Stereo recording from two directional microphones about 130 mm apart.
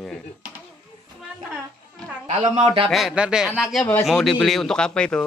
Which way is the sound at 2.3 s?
60° right (ahead or behind).